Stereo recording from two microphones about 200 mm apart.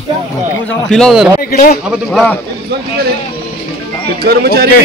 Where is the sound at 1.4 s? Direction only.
50° left (ahead or behind).